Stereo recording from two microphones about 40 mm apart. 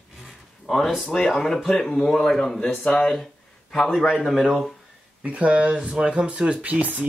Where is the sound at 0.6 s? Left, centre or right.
Centre.